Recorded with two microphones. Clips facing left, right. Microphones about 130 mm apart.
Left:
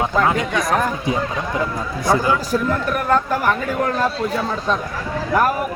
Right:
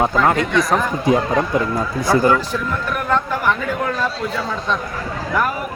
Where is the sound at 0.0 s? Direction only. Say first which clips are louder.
Right 2 dB; 45° right (ahead or behind).